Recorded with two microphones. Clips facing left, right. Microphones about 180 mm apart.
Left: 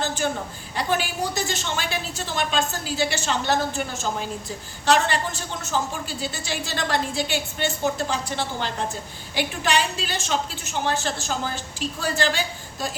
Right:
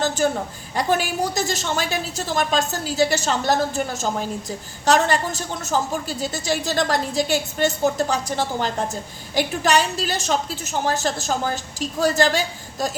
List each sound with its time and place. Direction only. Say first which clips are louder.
0.2 s a woman's voice: right 5 dB; 40° right (ahead or behind)